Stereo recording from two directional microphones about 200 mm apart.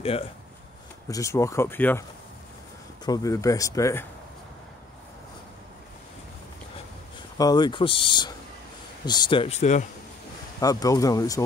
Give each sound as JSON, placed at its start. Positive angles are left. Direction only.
{"t": 0.0, "sound": "speech", "side_deg": 30}
{"t": 1.0, "sound": "speech", "side_deg": 15}
{"t": 3.1, "sound": "speech", "side_deg": 15}
{"t": 7.3, "sound": "speech", "side_deg": 20}
{"t": 10.6, "sound": "speech", "side_deg": 20}